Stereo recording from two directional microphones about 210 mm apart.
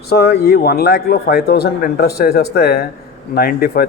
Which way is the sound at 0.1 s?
50° left (ahead or behind).